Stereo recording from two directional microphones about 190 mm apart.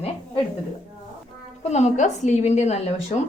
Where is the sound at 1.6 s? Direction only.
35° left (ahead or behind).